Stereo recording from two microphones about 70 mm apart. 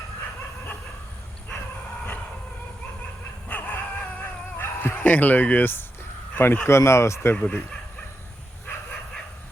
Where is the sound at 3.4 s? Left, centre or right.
Left.